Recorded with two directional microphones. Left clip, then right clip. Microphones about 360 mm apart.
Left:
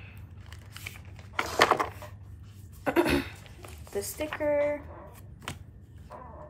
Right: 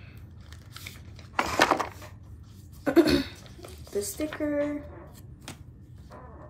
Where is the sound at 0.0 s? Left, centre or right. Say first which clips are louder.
Left 1 dB; centre.